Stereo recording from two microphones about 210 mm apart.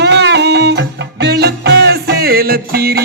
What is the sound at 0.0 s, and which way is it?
Music, 55° right (ahead or behind).